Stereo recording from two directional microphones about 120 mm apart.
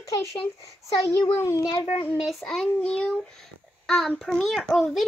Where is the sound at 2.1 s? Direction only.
Centre (ahead or behind).